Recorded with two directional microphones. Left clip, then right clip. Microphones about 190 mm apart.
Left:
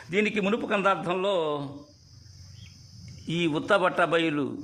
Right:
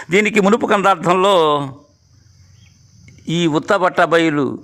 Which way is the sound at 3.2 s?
30° right (ahead or behind).